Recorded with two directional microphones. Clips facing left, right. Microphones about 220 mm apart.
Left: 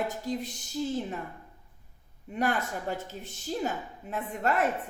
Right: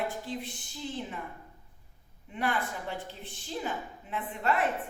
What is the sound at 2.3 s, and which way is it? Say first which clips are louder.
Speech: left 3 dB; 40° left (ahead or behind).